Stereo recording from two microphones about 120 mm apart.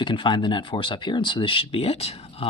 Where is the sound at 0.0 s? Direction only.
45° left (ahead or behind).